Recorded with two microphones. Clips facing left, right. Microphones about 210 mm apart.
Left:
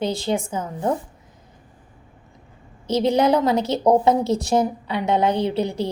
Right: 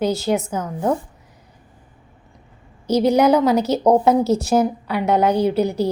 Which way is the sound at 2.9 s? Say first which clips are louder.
Right 3 dB; 25° left (ahead or behind).